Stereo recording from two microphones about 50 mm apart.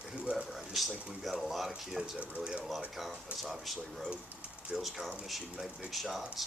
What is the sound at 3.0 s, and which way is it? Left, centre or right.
Speech, centre.